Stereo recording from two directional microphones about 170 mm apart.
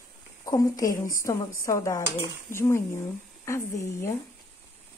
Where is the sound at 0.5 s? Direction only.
20° left (ahead or behind).